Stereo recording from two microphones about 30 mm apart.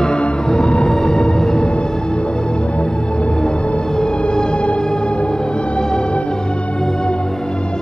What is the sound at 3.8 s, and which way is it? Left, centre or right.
Music, left.